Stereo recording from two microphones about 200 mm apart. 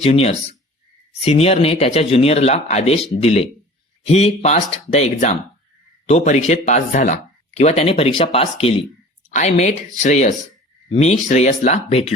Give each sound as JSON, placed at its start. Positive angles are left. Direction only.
{"t": 0.0, "sound": "speech", "side_deg": 30}